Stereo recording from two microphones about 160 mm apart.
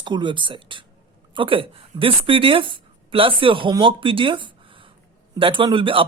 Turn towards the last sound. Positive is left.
turn(degrees=-30)  # may be behind; listen again after turning